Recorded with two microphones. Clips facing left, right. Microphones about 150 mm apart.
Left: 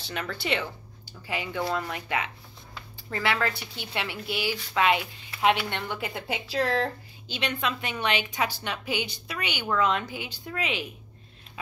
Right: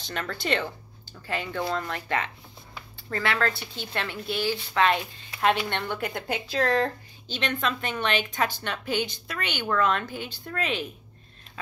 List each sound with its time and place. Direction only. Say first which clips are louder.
0.0 s speech: right 1 dB; 10° left (ahead or behind)